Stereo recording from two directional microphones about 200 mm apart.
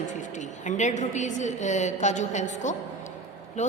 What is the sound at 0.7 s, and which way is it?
A woman's voice, 35° left (ahead or behind).